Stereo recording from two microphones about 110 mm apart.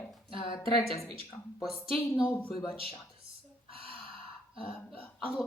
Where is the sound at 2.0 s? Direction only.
15° left (ahead or behind).